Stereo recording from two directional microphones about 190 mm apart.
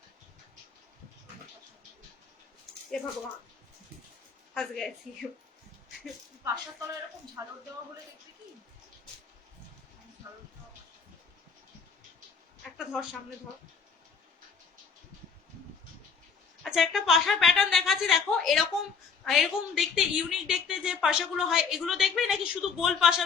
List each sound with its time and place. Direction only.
4.5 s a woman's voice: 5° left (ahead or behind)
6.4 s speech: 15° right (ahead or behind)
12.6 s speech: centre (ahead or behind)
16.6 s a woman's voice: centre (ahead or behind)